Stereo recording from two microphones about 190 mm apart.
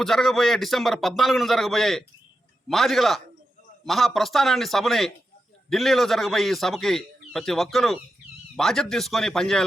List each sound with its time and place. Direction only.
0.0 s a man's voice: centre (ahead or behind)